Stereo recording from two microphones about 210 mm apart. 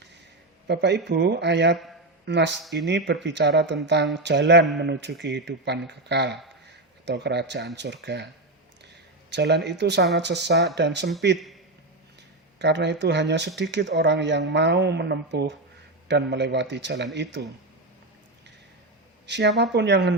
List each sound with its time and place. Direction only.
0.7 s speech: 55° right (ahead or behind)
9.3 s speech: 50° right (ahead or behind)
12.5 s speech: 55° right (ahead or behind)
19.3 s speech: 55° right (ahead or behind)